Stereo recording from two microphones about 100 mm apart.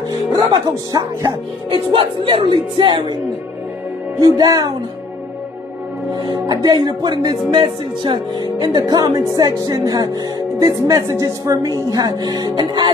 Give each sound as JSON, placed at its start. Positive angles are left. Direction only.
{"t": 0.5, "sound": "speech", "side_deg": -40}
{"t": 1.7, "sound": "speech", "side_deg": -55}
{"t": 4.2, "sound": "speech", "side_deg": -40}
{"t": 6.1, "sound": "music", "side_deg": -40}
{"t": 10.6, "sound": "speech", "side_deg": -35}